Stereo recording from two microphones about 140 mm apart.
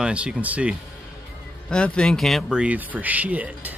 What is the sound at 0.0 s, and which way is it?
Speech, 10° right (ahead or behind).